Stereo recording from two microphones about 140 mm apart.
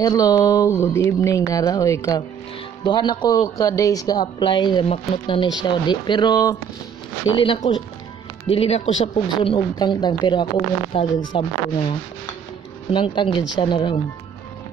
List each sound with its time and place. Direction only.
0.0 s speech: 25° left (ahead or behind)
12.9 s speech: 35° left (ahead or behind)